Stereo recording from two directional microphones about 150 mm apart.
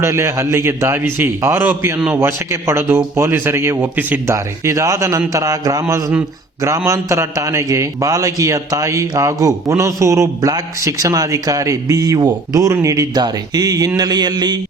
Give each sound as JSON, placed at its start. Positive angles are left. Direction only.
{"t": 0.0, "sound": "a man's voice", "side_deg": -20}